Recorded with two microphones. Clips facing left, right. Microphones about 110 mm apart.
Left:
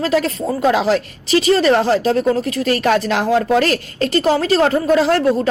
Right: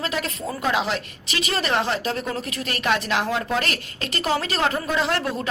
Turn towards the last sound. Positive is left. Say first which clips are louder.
# left 9 dB
turn(degrees=40)  # may be behind; listen again after turning